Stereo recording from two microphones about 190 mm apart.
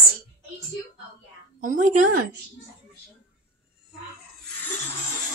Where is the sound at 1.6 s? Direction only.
45° right (ahead or behind).